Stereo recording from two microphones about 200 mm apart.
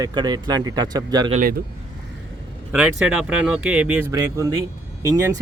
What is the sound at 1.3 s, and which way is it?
Speech, 40° right (ahead or behind).